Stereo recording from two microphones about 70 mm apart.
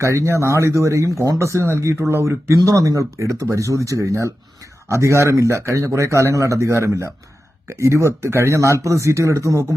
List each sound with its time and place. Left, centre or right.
0.0 s speech: right
2.6 s speech: right